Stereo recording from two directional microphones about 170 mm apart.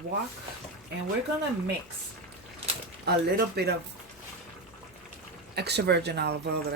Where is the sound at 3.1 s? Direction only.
70° right (ahead or behind).